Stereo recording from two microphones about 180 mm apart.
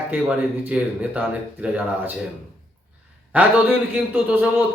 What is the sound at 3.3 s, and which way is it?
Speech, 10° right (ahead or behind).